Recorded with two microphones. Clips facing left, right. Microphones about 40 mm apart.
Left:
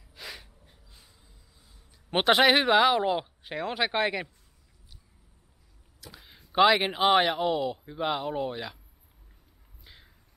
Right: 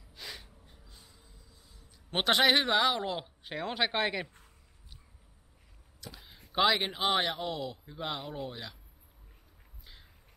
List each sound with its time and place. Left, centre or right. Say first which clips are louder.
0.1 s snort: left 3 dB; centre
2.0 s speech: left 5 dB; centre
3.4 s speech: left 1 dB; centre
5.9 s a sound: even; centre
6.5 s speech: left 6 dB; centre